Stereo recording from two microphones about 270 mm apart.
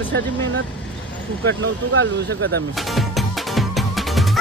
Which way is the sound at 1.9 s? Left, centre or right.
Right.